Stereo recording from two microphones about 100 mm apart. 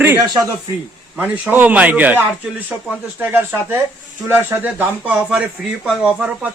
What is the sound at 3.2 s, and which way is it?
A man's voice, 20° right (ahead or behind).